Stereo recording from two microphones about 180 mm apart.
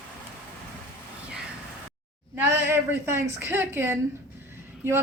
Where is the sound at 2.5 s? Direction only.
15° right (ahead or behind).